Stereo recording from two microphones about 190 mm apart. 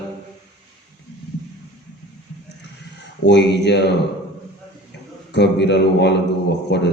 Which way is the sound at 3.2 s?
65° left (ahead or behind).